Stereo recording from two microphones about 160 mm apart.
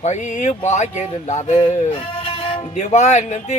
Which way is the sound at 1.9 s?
35° left (ahead or behind).